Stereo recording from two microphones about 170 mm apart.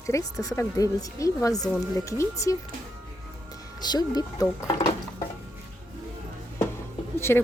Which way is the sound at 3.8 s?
25° left (ahead or behind).